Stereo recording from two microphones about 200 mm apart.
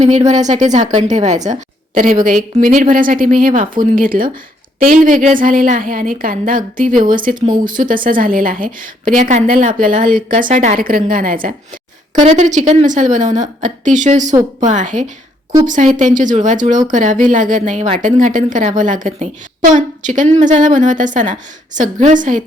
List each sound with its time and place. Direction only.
0.0 s a woman's voice: 35° right (ahead or behind)
7.3 s speech: 20° right (ahead or behind)
7.7 s a woman's voice: 40° right (ahead or behind)